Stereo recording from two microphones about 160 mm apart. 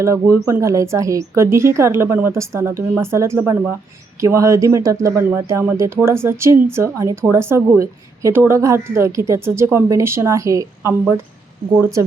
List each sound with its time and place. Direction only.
0.0 s speech: 20° right (ahead or behind)